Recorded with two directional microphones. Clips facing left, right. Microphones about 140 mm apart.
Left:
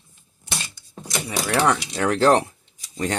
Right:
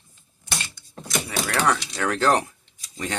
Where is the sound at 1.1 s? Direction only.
20° left (ahead or behind).